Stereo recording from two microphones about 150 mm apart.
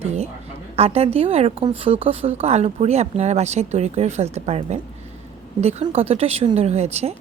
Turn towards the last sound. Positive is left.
turn(degrees=-45)  # may be behind; listen again after turning